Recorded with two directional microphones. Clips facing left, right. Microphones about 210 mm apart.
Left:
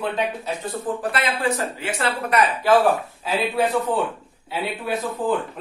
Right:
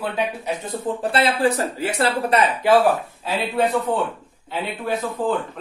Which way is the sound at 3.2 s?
Centre (ahead or behind).